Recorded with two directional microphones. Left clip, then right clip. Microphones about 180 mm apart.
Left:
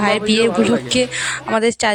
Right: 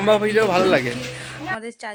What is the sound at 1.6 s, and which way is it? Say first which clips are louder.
Speech: left 16 dB; 50° left (ahead or behind).